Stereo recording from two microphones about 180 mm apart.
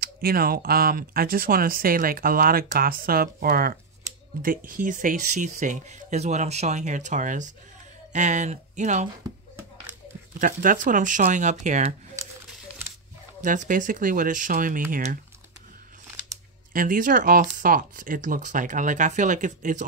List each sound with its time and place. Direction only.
0.0 s speech: 55° right (ahead or behind)
10.4 s speech: 50° right (ahead or behind)
13.4 s speech: 45° right (ahead or behind)
16.7 s speech: 50° right (ahead or behind)